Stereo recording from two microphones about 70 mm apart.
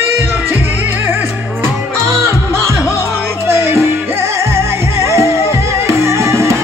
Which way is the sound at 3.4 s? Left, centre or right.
Right.